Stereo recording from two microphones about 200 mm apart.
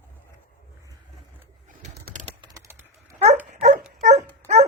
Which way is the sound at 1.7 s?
40° right (ahead or behind).